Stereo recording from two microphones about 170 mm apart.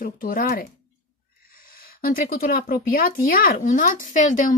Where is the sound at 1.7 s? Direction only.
60° left (ahead or behind).